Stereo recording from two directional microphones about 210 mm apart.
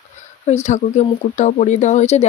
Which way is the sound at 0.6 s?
35° left (ahead or behind).